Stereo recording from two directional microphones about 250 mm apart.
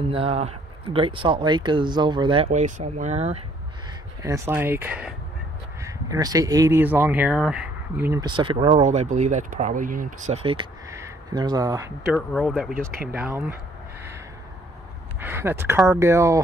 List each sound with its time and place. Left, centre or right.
0.1 s speech: right
4.2 s speech: centre
12.1 s speech: centre
15.1 s speech: centre